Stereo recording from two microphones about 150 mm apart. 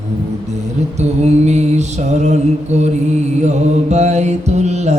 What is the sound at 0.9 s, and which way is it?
Mantra, 50° right (ahead or behind).